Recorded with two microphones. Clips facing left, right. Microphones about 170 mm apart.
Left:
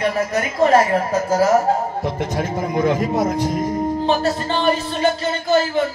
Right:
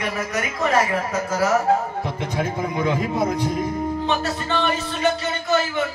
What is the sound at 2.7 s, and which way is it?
Speech, 45° left (ahead or behind).